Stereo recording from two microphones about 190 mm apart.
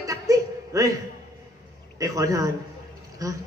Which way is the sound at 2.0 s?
15° right (ahead or behind).